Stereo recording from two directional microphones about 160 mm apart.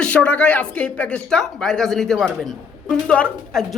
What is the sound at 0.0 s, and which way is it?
A woman's voice, 10° left (ahead or behind).